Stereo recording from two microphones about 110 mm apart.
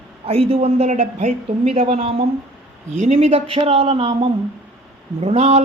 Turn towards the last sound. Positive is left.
turn(degrees=-65)  # may be behind; listen again after turning